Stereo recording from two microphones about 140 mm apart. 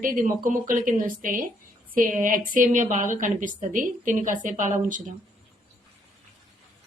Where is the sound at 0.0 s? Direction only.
80° right.